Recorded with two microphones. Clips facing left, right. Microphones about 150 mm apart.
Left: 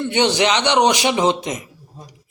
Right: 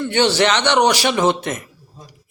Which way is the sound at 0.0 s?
20° left (ahead or behind).